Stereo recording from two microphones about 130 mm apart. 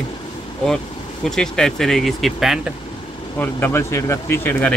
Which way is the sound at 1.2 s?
5° left (ahead or behind).